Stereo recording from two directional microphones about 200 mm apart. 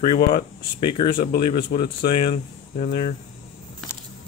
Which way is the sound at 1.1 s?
50° left (ahead or behind).